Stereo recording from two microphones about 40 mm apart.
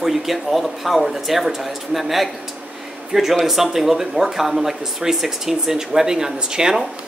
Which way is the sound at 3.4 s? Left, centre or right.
Centre.